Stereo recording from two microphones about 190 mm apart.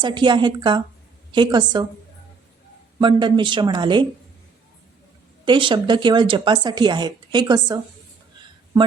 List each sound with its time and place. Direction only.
0.0 s speech: 25° right (ahead or behind)
3.0 s speech: 25° right (ahead or behind)
5.5 s speech: 25° right (ahead or behind)